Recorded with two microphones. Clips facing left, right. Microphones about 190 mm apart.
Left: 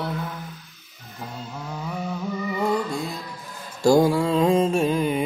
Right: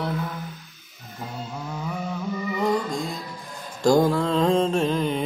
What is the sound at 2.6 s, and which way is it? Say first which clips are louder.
Music: even; 5° left (ahead or behind).